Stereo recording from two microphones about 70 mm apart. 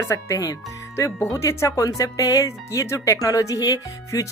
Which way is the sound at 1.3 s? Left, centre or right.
Left.